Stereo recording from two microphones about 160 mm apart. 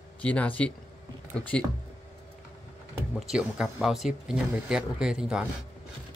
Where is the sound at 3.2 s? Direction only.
5° right (ahead or behind).